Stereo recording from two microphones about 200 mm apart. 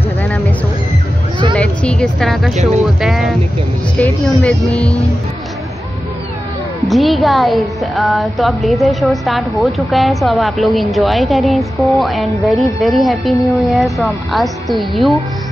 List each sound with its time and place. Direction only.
1.5 s music: 5° left (ahead or behind)
2.5 s speech: 35° right (ahead or behind)
2.8 s speech: centre (ahead or behind)
6.8 s speech: centre (ahead or behind)